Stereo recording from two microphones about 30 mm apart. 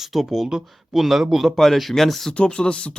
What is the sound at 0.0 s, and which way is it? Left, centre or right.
Speech, centre.